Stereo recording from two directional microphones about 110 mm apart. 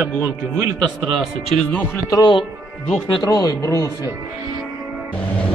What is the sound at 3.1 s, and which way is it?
Speech, 35° left (ahead or behind).